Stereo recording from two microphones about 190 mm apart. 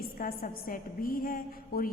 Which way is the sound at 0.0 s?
50° left (ahead or behind).